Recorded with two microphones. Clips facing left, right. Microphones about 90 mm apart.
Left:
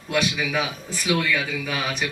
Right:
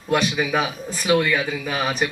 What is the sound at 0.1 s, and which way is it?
A man's voice, 40° right (ahead or behind).